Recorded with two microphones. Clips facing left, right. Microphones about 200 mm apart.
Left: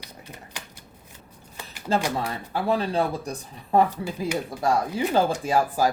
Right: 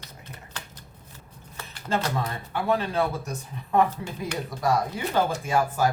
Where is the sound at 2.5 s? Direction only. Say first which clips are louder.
Left 1 dB; 35° left (ahead or behind).